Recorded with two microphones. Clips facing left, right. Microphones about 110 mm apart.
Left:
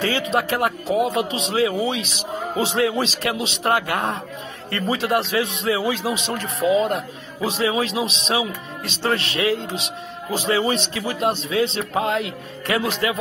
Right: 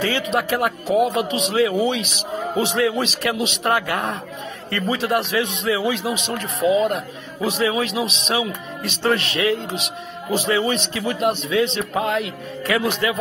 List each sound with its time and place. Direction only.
0.0 s speech: 30° left (ahead or behind)